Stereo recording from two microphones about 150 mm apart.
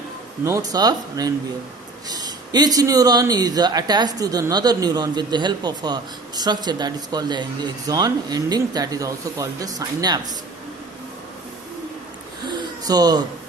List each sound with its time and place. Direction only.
0.4 s speech: 20° right (ahead or behind)
12.5 s hoot: 25° right (ahead or behind)